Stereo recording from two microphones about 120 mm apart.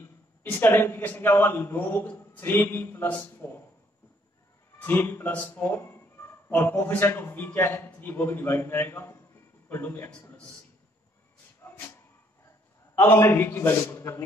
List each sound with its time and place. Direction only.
0.0 s a man's voice: 20° left (ahead or behind)
4.7 s a man's voice: 15° left (ahead or behind)
11.6 s a sound: 20° left (ahead or behind)
12.9 s speech: 20° left (ahead or behind)